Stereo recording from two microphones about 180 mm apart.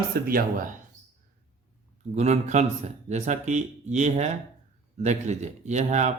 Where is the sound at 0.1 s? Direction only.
55° right (ahead or behind).